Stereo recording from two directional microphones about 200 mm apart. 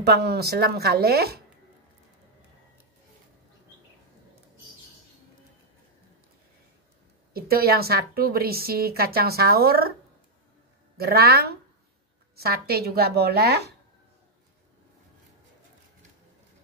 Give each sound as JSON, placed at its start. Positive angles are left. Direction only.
{"t": 0.0, "sound": "a woman's voice", "side_deg": -55}
{"t": 7.3, "sound": "a woman's voice", "side_deg": -50}
{"t": 11.0, "sound": "a woman's voice", "side_deg": -50}